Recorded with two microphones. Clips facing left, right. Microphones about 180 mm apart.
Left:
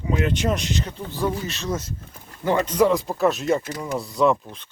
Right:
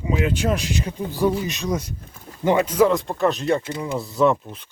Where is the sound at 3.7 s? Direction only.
25° right (ahead or behind).